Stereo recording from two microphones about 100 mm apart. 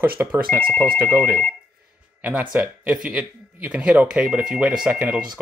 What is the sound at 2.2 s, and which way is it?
Speech, 15° right (ahead or behind).